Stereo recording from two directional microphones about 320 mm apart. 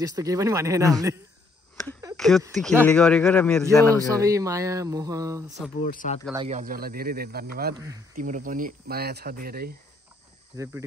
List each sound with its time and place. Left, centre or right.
0.0 s speech: centre
2.1 s speech: centre
3.9 s speech: centre
5.9 s speech: left
6.3 s speech: centre
10.5 s speech: centre